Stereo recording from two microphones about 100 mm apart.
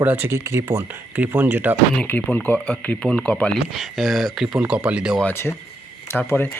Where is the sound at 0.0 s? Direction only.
20° right (ahead or behind).